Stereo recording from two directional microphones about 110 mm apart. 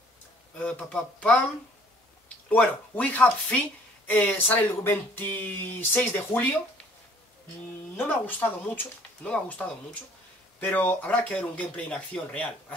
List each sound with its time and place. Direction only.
0.6 s speech: 10° left (ahead or behind)
2.5 s speech: 15° left (ahead or behind)
7.9 s speech: 15° left (ahead or behind)